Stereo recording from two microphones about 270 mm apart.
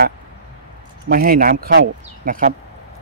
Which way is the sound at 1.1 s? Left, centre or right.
Right.